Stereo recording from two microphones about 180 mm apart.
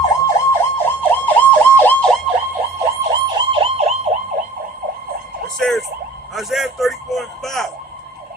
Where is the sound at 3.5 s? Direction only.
30° right (ahead or behind).